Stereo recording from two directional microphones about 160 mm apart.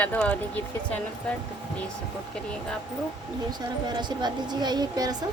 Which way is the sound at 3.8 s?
25° right (ahead or behind).